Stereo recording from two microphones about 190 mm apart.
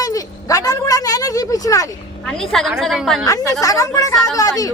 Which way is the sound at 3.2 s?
20° left (ahead or behind).